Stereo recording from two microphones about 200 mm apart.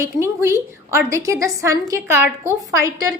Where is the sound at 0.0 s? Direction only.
15° right (ahead or behind).